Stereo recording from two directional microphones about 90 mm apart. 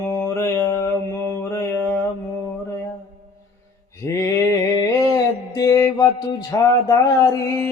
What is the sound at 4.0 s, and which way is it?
Mantra, 35° left (ahead or behind).